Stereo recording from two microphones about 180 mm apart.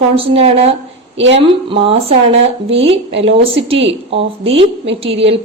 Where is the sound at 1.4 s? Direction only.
30° right (ahead or behind).